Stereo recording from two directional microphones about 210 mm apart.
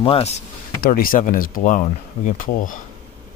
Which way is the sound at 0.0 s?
25° left (ahead or behind).